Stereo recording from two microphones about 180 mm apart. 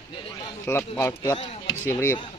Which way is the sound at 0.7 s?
15° left (ahead or behind).